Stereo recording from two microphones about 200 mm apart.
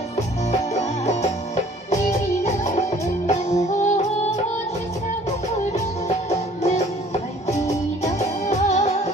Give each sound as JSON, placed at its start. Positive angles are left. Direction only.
{"t": 0.7, "sound": "music", "side_deg": 35}
{"t": 3.2, "sound": "music", "side_deg": 35}
{"t": 6.6, "sound": "music", "side_deg": 35}
{"t": 8.0, "sound": "music", "side_deg": 35}